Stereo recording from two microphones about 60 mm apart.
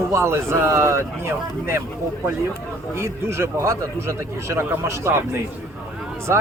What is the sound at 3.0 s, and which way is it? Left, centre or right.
Speech, right.